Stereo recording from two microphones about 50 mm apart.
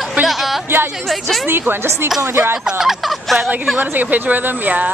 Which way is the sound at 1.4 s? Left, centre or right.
Right.